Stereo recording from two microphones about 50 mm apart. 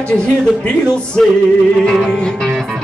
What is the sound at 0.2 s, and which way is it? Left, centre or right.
Music, centre.